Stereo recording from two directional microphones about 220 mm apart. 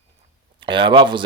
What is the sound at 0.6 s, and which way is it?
Speech, 20° right (ahead or behind).